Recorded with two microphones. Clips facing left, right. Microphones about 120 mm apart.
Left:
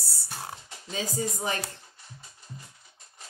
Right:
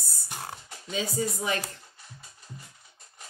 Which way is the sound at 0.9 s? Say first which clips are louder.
Right 2 dB; 35° left (ahead or behind).